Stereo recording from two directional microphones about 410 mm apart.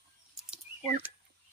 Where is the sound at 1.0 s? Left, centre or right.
Centre.